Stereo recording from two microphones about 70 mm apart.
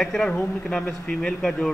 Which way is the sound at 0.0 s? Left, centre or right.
Centre.